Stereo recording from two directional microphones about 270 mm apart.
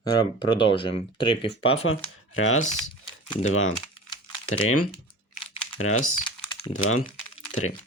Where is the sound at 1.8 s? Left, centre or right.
Left.